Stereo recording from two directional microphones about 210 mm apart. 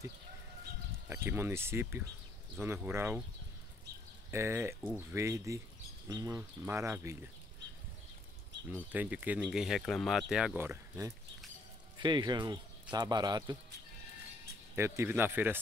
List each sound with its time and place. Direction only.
1.0 s speech: 10° right (ahead or behind)
4.3 s speech: 10° right (ahead or behind)
8.7 s speech: 10° right (ahead or behind)
14.8 s speech: 10° right (ahead or behind)